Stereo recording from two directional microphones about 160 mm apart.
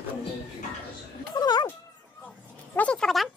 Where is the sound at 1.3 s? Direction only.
25° left (ahead or behind).